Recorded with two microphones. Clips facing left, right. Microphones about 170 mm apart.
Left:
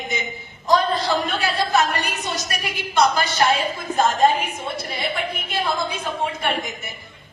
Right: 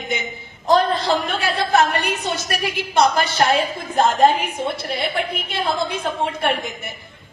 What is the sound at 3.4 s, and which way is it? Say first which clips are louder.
Speech: right 2 dB; 60° right (ahead or behind).